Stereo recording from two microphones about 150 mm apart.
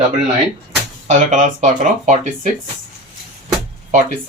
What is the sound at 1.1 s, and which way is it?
Speech, 55° right (ahead or behind).